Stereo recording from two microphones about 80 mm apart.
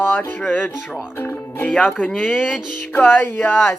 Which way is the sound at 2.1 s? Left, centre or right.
Centre.